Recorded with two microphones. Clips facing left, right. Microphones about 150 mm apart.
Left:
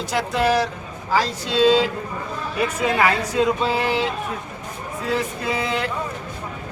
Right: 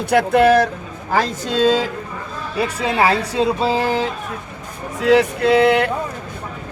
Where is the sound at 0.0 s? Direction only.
60° right (ahead or behind).